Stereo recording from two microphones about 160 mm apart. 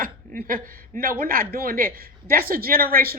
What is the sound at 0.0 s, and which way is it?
A woman's voice, 60° right (ahead or behind).